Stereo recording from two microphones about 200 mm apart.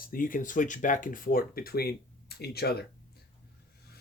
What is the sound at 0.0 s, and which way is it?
Speech, 45° left (ahead or behind).